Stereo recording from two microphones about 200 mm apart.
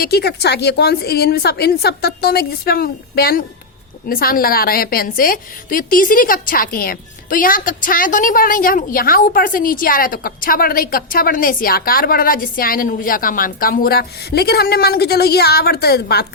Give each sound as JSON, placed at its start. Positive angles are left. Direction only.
{"t": 0.0, "sound": "a woman's voice", "side_deg": 55}